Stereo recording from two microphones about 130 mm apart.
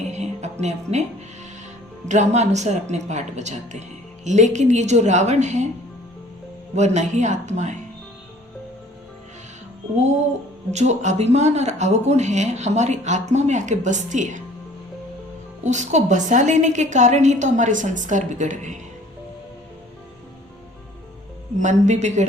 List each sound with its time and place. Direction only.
0.1 s music: 60° right (ahead or behind)
0.6 s speech: 60° right (ahead or behind)
2.0 s speech: 65° right (ahead or behind)
6.7 s speech: 60° right (ahead or behind)
10.7 s speech: 60° right (ahead or behind)
15.6 s a woman's voice: 65° right (ahead or behind)
21.6 s speech: 70° right (ahead or behind)